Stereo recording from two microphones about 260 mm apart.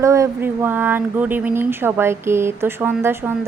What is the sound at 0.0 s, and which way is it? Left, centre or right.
Speech, centre.